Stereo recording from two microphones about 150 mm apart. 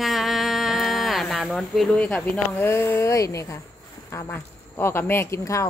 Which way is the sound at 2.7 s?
15° left (ahead or behind).